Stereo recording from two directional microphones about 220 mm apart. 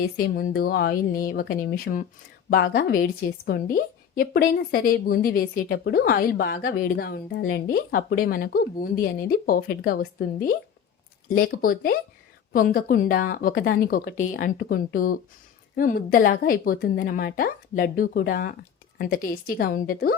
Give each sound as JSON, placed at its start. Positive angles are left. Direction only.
{"t": 0.0, "sound": "a woman's voice", "side_deg": 40}
{"t": 19.5, "sound": "a woman's voice", "side_deg": 45}